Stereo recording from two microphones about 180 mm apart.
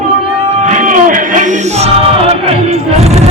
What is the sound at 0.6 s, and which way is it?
Music, 45° right (ahead or behind).